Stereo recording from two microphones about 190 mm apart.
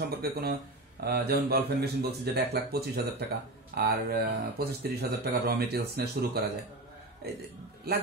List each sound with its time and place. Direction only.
0.0 s speech: 55° right (ahead or behind)
7.9 s speech: 55° right (ahead or behind)